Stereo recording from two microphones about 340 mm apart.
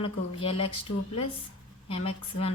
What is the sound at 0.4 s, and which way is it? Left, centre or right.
Speech, centre.